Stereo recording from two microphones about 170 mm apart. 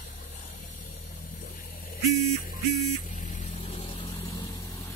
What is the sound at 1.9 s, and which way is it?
Vehicle, 55° left (ahead or behind).